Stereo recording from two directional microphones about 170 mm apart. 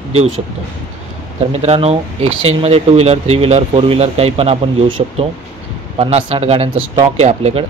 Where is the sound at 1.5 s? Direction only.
40° right (ahead or behind).